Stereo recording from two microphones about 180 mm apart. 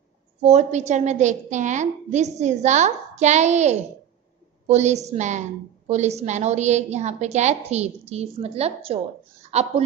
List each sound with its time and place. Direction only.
0.4 s a woman's voice: 40° right (ahead or behind)